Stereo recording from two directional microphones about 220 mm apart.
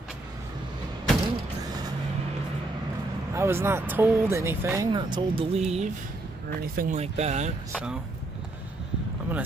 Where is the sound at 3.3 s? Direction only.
10° right (ahead or behind); by 7.5 s 30° right (ahead or behind).